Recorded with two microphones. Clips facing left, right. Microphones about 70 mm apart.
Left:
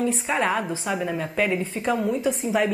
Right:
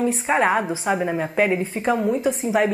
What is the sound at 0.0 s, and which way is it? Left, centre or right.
A woman's voice, right.